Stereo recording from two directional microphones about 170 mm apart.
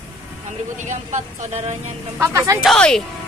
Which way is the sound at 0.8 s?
45° right (ahead or behind).